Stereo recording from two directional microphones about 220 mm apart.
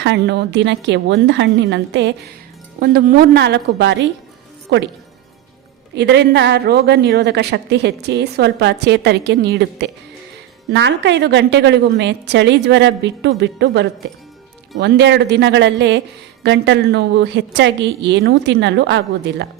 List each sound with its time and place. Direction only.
0.0 s a man's voice: 50° right (ahead or behind)
5.9 s a man's voice: 50° right (ahead or behind)